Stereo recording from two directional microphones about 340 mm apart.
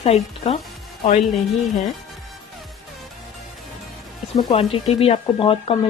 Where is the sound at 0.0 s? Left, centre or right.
Centre.